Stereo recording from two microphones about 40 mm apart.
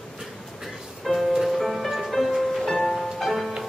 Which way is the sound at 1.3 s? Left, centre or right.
Centre.